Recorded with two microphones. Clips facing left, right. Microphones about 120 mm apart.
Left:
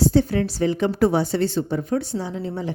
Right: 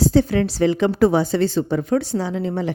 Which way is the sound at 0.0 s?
90° right.